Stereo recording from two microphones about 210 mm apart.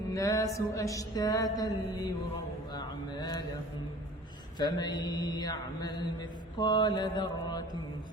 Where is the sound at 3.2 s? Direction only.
20° left (ahead or behind).